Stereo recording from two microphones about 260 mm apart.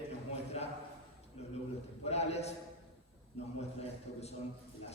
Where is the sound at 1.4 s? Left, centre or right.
Left.